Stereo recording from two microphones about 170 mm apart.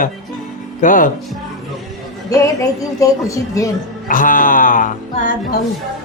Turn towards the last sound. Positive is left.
turn(degrees=50)  # may be behind; listen again after turning